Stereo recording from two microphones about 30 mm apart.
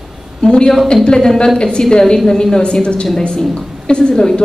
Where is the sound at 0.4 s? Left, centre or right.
Left.